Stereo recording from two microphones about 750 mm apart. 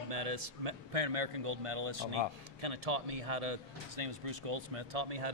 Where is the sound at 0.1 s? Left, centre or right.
Right.